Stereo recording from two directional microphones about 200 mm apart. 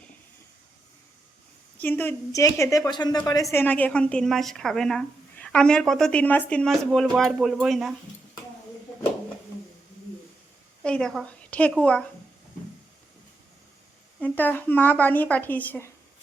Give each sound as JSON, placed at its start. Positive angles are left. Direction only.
{"t": 1.8, "sound": "speech", "side_deg": 10}
{"t": 3.5, "sound": "speech", "side_deg": 10}
{"t": 10.8, "sound": "speech", "side_deg": 5}
{"t": 14.2, "sound": "speech", "side_deg": 10}